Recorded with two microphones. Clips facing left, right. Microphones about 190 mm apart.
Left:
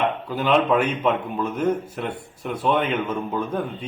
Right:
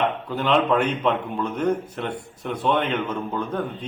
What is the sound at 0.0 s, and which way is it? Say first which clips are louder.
A man's voice: left 1 dB; 5° left (ahead or behind).